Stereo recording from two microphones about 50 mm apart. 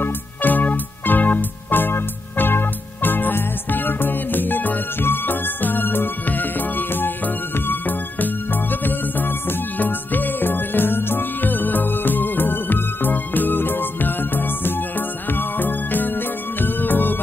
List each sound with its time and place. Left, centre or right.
0.0 s music: left